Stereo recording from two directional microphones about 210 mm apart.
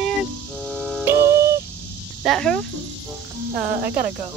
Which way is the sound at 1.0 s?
15° right (ahead or behind).